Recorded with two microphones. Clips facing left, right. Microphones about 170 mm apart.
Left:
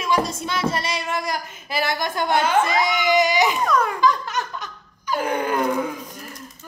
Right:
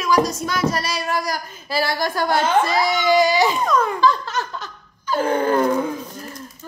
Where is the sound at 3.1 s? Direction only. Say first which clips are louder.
Right 3 dB; 20° left (ahead or behind).